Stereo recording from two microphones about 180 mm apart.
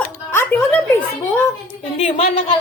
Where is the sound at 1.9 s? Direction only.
35° left (ahead or behind).